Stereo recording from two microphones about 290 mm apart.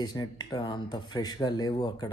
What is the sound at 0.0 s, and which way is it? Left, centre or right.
Speech, centre.